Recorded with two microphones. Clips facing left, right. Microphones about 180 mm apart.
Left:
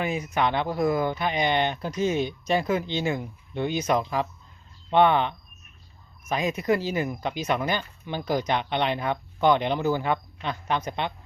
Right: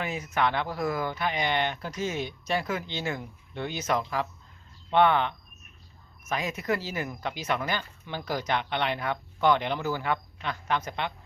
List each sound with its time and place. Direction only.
0.0 s speech: 15° left (ahead or behind)